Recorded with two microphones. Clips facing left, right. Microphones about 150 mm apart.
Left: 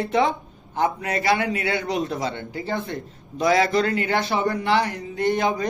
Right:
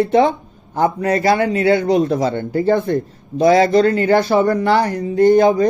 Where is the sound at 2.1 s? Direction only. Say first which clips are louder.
Right 10 dB; 45° right (ahead or behind).